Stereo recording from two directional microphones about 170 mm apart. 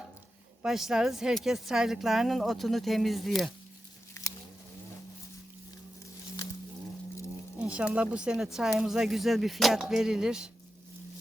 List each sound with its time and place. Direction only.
0.6 s speech: centre (ahead or behind)
4.2 s biting: 15° left (ahead or behind)
7.6 s speech: 5° right (ahead or behind)